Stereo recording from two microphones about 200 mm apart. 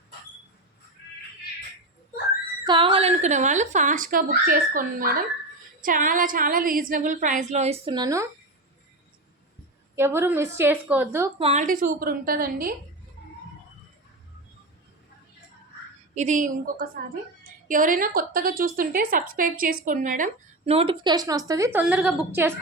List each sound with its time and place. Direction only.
2.6 s speech: 25° right (ahead or behind)
9.9 s a woman's voice: 10° right (ahead or behind)
11.3 s a woman's voice: 30° right (ahead or behind); by 12.7 s 45° right (ahead or behind)
16.1 s a woman's voice: 35° right (ahead or behind); by 22.5 s 10° right (ahead or behind)